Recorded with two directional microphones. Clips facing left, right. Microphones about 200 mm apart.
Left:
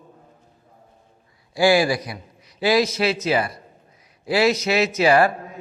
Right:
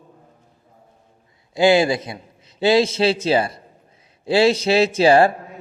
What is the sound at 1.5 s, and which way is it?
A man's voice, 20° right (ahead or behind).